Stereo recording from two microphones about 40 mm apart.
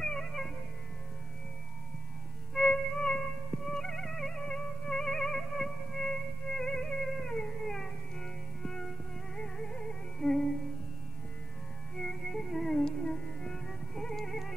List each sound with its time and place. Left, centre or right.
0.0 s music: centre
2.7 s music: centre
12.0 s music: centre